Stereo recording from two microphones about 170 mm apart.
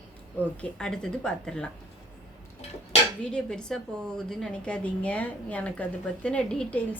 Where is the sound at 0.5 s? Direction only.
5° left (ahead or behind).